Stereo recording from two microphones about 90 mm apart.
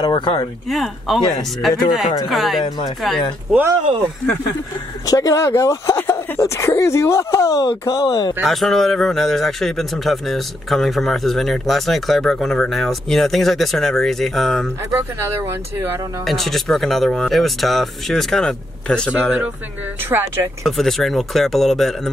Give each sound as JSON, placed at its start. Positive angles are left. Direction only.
{"t": 0.0, "sound": "speech", "side_deg": 55}
{"t": 0.7, "sound": "speech", "side_deg": 0}
{"t": 5.0, "sound": "speech", "side_deg": 40}
{"t": 5.9, "sound": "a sound", "side_deg": 25}
{"t": 6.4, "sound": "speech", "side_deg": 35}
{"t": 8.4, "sound": "speech", "side_deg": 0}
{"t": 16.3, "sound": "speech", "side_deg": 5}
{"t": 20.6, "sound": "speech", "side_deg": 0}